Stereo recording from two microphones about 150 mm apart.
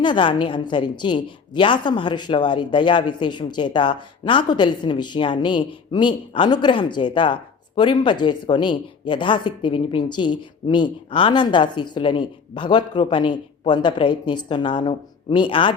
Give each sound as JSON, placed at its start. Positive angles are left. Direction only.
{"t": 0.0, "sound": "a woman's voice", "side_deg": 30}